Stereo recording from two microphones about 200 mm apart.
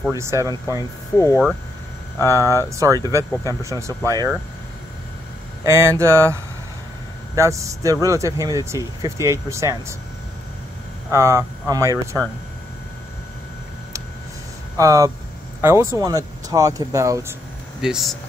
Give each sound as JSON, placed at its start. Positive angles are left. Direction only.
{"t": 0.1, "sound": "speech", "side_deg": -15}
{"t": 1.1, "sound": "speech", "side_deg": 15}
{"t": 2.2, "sound": "speech", "side_deg": -15}
{"t": 5.7, "sound": "speech", "side_deg": -15}
{"t": 11.1, "sound": "speech", "side_deg": -15}
{"t": 14.8, "sound": "speech", "side_deg": -15}
{"t": 17.8, "sound": "speech", "side_deg": 0}